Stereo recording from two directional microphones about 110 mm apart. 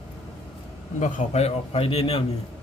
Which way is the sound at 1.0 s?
75° left (ahead or behind).